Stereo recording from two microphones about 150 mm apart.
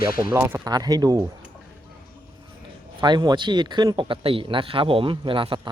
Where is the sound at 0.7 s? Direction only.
25° right (ahead or behind).